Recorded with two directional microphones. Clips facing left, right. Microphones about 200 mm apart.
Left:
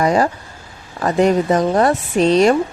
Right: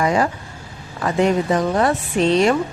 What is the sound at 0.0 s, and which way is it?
Speech, 40° left (ahead or behind).